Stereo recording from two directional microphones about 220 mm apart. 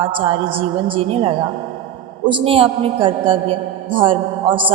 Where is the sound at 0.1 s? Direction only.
25° right (ahead or behind).